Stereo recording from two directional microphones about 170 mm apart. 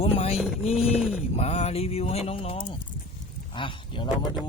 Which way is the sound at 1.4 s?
40° left (ahead or behind).